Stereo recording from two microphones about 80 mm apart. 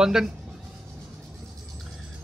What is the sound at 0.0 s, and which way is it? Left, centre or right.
Speech, centre.